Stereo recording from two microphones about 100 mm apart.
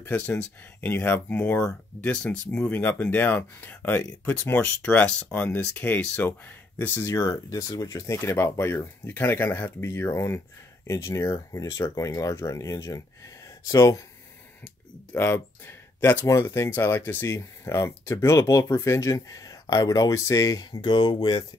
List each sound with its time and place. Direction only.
0.0 s speech: 20° left (ahead or behind)
7.2 s speech: 35° left (ahead or behind)
15.1 s speech: 25° left (ahead or behind); by 21.5 s 50° left (ahead or behind)